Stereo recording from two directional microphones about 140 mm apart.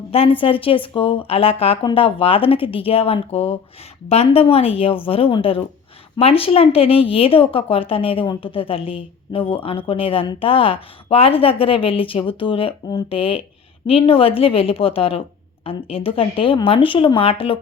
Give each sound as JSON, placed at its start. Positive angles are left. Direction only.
{"t": 0.1, "sound": "a woman's voice", "side_deg": 40}